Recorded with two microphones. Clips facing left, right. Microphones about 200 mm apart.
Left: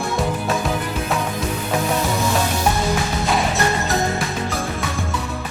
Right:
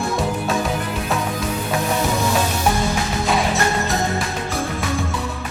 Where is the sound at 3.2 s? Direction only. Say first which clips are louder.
Right 1 dB; centre (ahead or behind).